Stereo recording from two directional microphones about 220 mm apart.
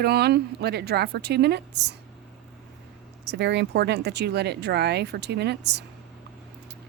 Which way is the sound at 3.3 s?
55° right (ahead or behind).